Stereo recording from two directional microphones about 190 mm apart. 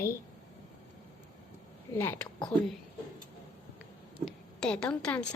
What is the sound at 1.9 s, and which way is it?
Speech, 10° left (ahead or behind).